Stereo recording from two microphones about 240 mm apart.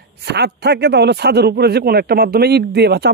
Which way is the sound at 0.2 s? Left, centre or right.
Right.